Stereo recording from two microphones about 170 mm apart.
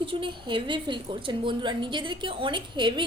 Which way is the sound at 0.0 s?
30° right (ahead or behind).